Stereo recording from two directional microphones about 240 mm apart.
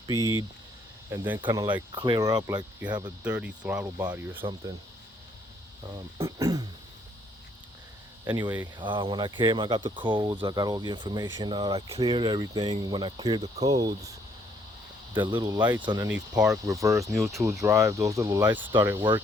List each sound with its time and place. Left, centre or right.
1.1 s speech: centre
1.4 s speech: centre
3.2 s speech: centre
6.1 s speech: centre
8.2 s speech: centre
15.1 s speech: centre
16.0 s speech: centre
17.2 s speech: centre
17.4 s speech: centre